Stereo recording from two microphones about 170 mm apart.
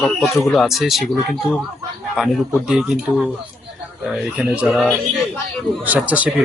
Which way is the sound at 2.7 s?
5° right (ahead or behind).